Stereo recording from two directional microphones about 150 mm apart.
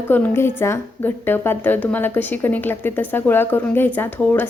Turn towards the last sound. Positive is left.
turn(degrees=10)  # may be behind; listen again after turning